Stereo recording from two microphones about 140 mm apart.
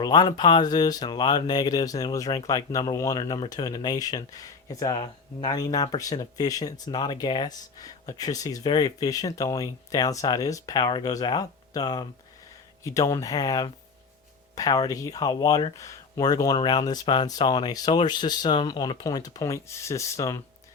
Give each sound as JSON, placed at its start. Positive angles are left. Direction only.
{"t": 0.0, "sound": "speech", "side_deg": 30}